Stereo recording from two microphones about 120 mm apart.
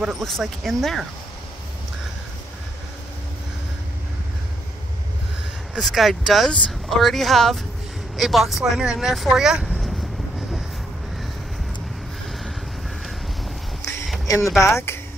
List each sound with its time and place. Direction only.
0.0 s speech: centre (ahead or behind)
5.8 s speech: centre (ahead or behind)
14.2 s speech: 25° left (ahead or behind)